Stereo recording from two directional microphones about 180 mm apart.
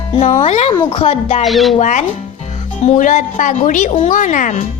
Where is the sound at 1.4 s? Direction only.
Centre (ahead or behind).